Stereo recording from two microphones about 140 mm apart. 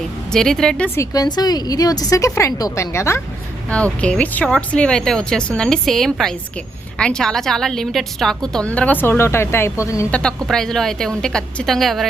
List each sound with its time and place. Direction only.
0.3 s speech: 5° left (ahead or behind)
0.9 s a woman's voice: 25° left (ahead or behind)
3.7 s a woman's voice: 10° left (ahead or behind)
10.1 s speech: 5° left (ahead or behind)